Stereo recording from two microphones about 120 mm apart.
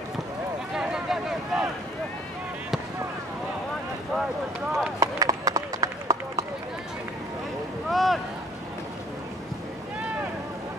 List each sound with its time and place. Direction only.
0.7 s a sound: 5° right (ahead or behind)
5.0 s run: 25° right (ahead or behind)
7.9 s boat: centre (ahead or behind)